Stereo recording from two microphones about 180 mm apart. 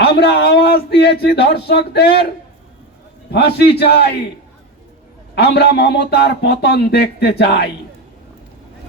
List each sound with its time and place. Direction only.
0.0 s a man's voice: 65° left (ahead or behind)
3.3 s a man's voice: 65° left (ahead or behind)
5.3 s a man's voice: 65° left (ahead or behind)